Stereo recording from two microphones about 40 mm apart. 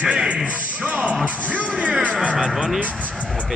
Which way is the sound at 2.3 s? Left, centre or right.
Centre.